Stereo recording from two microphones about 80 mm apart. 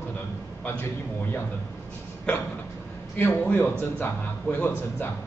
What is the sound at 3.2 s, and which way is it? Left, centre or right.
A man's voice, left.